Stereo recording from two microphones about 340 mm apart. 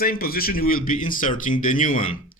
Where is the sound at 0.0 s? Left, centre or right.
Left.